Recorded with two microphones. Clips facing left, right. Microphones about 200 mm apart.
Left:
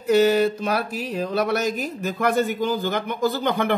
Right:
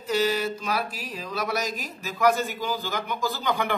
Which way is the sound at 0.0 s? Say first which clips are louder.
Left 8 dB; 60° left (ahead or behind).